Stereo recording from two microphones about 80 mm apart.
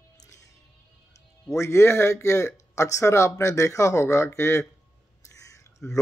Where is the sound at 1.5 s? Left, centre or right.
Left.